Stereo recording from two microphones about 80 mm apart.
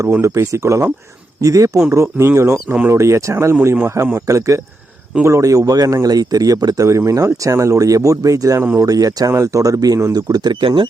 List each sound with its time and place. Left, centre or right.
0.1 s speech: right